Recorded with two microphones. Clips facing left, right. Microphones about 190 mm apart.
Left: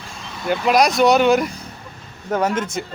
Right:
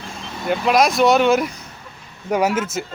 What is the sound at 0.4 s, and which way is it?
Speech, centre (ahead or behind).